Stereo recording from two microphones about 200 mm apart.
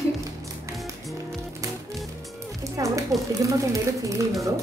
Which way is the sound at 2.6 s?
15° right (ahead or behind).